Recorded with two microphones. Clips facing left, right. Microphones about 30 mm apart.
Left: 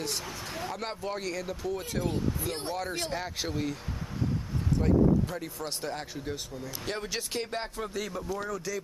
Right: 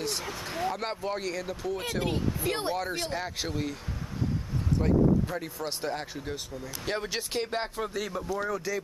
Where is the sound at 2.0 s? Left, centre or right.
Right.